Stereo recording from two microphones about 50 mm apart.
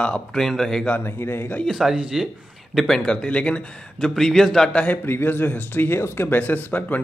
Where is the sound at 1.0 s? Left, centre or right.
Left.